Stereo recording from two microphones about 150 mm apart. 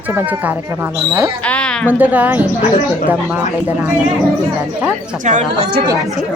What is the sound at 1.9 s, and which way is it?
Speech, 10° right (ahead or behind).